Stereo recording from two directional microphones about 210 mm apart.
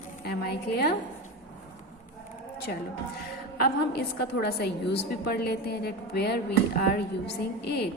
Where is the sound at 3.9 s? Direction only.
50° left (ahead or behind).